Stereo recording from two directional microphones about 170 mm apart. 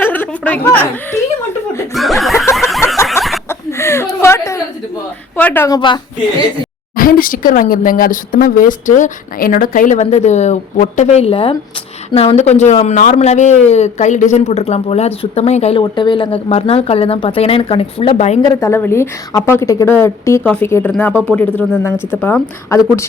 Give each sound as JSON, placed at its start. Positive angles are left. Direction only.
{"t": 0.0, "sound": "a woman's voice", "side_deg": 10}
{"t": 1.9, "sound": "chuckle", "side_deg": 0}
{"t": 2.6, "sound": "a sound", "side_deg": 0}
{"t": 3.2, "sound": "chuckle", "side_deg": 15}
{"t": 3.5, "sound": "a sound", "side_deg": 15}
{"t": 5.4, "sound": "a woman's voice", "side_deg": 10}
{"t": 5.6, "sound": "a woman's voice", "side_deg": 25}
{"t": 6.9, "sound": "a man's voice", "side_deg": 55}
{"t": 15.8, "sound": "a man's voice", "side_deg": 25}
{"t": 18.4, "sound": "a woman's voice", "side_deg": 20}